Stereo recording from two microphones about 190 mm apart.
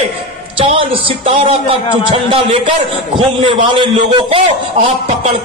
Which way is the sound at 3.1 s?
25° right (ahead or behind).